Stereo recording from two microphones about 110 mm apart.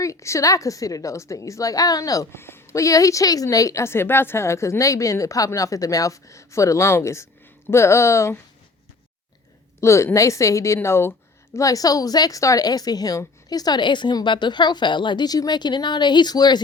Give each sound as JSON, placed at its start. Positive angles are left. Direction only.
{"t": 0.0, "sound": "a woman's voice", "side_deg": 30}
{"t": 9.8, "sound": "a woman's voice", "side_deg": 25}